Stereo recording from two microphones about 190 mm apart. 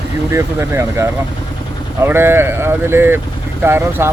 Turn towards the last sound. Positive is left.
turn(degrees=-10)  # may be behind; listen again after turning